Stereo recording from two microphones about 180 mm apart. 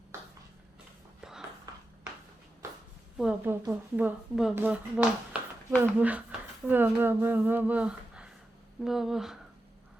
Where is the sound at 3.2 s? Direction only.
10° right (ahead or behind).